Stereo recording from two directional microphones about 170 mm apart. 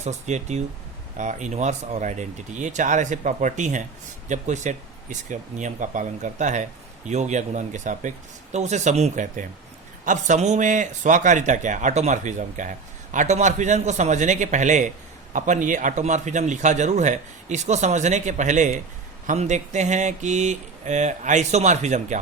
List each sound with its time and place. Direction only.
0.0 s a man's voice: 40° right (ahead or behind)